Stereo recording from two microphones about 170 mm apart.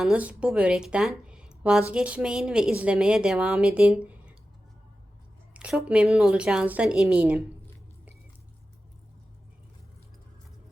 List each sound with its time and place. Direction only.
0.0 s a woman's voice: 5° right (ahead or behind)
5.5 s a woman's voice: 5° right (ahead or behind)